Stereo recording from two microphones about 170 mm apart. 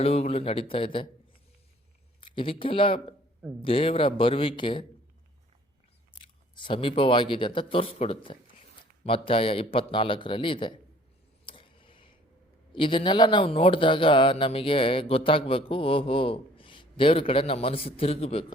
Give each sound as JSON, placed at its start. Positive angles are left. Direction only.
{"t": 0.0, "sound": "speech", "side_deg": 35}
{"t": 2.2, "sound": "speech", "side_deg": 30}
{"t": 6.6, "sound": "speech", "side_deg": 30}
{"t": 11.4, "sound": "a sound", "side_deg": 30}
{"t": 12.7, "sound": "speech", "side_deg": 30}